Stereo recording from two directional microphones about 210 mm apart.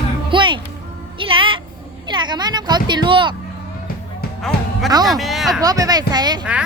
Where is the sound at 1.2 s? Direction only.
25° right (ahead or behind).